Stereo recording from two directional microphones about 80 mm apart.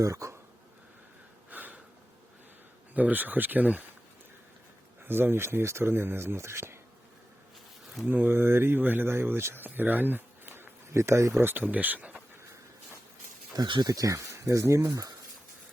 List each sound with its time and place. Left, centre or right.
0.0 s speech: right
1.5 s a sound: right
2.9 s speech: right
5.0 s speech: right
8.0 s speech: right
11.4 s speech: right
13.8 s speech: right